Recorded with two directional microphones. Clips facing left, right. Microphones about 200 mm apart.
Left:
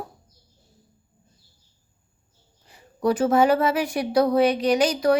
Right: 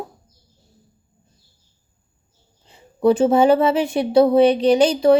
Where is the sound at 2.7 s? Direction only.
25° right (ahead or behind).